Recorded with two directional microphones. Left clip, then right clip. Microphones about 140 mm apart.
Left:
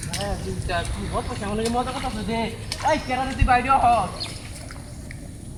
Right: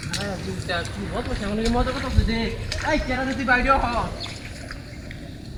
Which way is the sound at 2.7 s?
5° right (ahead or behind).